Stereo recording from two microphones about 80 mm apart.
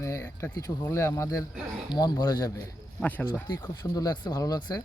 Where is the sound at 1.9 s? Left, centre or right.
Left.